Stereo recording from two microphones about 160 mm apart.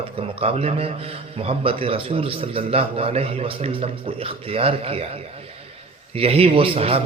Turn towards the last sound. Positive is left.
turn(degrees=-35)  # may be behind; listen again after turning